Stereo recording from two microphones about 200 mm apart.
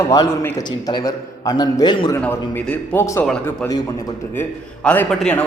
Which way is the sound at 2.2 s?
10° left (ahead or behind).